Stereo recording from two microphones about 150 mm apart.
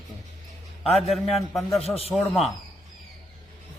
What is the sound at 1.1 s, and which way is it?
A man's voice, centre (ahead or behind).